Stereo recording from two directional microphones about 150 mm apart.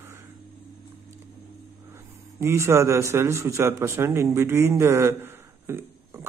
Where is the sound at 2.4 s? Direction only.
20° right (ahead or behind).